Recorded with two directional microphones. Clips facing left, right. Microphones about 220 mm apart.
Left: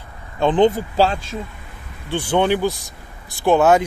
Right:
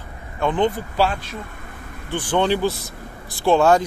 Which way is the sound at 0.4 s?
35° left (ahead or behind).